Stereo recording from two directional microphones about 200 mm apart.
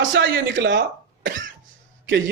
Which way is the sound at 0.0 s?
65° right (ahead or behind).